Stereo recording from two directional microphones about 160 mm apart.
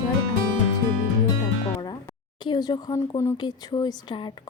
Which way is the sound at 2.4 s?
25° left (ahead or behind).